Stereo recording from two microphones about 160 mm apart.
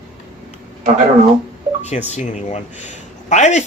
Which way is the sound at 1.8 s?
45° left (ahead or behind).